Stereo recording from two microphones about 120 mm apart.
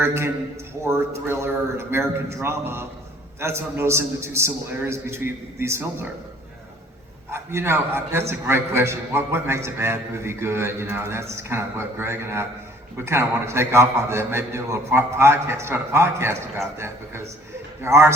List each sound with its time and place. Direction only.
0.0 s a man's voice: 20° right (ahead or behind)
7.3 s a man's voice: 20° right (ahead or behind)